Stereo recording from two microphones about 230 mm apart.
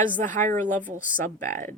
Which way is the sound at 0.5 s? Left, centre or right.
Centre.